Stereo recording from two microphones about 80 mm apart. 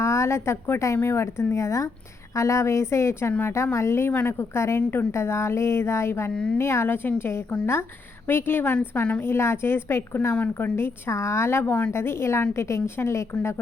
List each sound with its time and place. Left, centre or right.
0.0 s a woman's voice: left
6.3 s a woman's voice: centre
6.6 s a woman's voice: left
9.2 s a woman's voice: left